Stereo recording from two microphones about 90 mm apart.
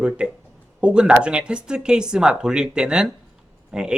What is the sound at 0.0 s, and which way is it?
Speech, 10° right (ahead or behind).